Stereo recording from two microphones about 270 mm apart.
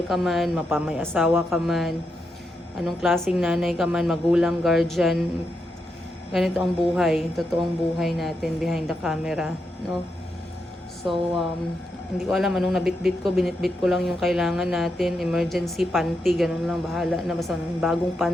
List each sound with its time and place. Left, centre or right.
0.1 s speech: centre
6.3 s speech: centre
11.0 s speech: centre